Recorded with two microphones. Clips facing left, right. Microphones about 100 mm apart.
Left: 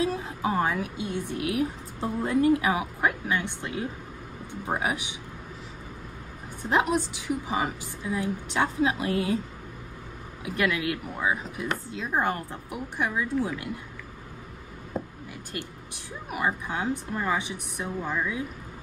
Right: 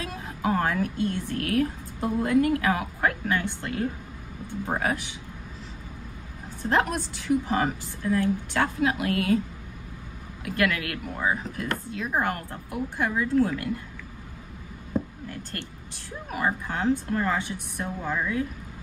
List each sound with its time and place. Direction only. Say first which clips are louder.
0.0 s a woman's voice: left 3 dB; 20° left (ahead or behind)
6.6 s a woman's voice: even; 15° left (ahead or behind)
10.4 s speech: even; 15° left (ahead or behind)
13.0 s a woman's voice: right 4 dB; 10° left (ahead or behind)
15.2 s a woman's voice: right 1 dB; 15° left (ahead or behind)